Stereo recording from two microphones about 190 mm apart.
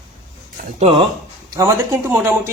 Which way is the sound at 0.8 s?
30° right (ahead or behind).